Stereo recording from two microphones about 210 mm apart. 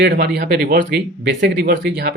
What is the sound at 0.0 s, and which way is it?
Speech, 50° right (ahead or behind).